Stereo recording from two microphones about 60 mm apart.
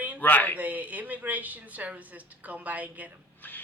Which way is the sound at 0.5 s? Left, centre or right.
Right.